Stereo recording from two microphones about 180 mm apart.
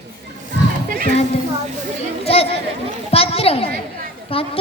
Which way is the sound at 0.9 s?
45° right (ahead or behind).